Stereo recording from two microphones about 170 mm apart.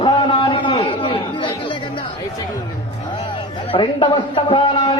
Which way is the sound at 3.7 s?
30° left (ahead or behind).